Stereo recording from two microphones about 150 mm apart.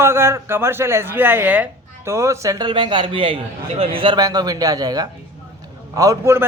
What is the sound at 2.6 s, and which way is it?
A man's voice, 35° right (ahead or behind).